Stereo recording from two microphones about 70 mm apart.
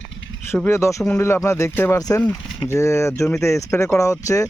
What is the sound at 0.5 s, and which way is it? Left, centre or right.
Speech, left.